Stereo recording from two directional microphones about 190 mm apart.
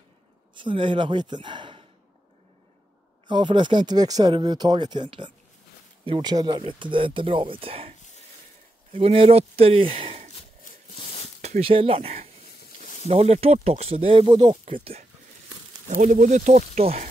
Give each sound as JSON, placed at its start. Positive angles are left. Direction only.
{"t": 0.6, "sound": "speech", "side_deg": -25}
{"t": 3.3, "sound": "speech", "side_deg": -25}
{"t": 8.9, "sound": "speech", "side_deg": -30}
{"t": 11.4, "sound": "speech", "side_deg": -35}